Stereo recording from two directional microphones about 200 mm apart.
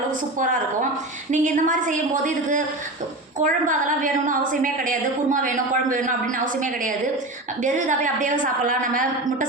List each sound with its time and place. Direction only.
1.3 s a woman's voice: 40° right (ahead or behind)